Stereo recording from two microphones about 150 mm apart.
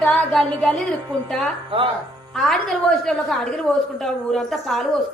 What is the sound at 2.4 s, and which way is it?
A woman's voice, 5° left (ahead or behind).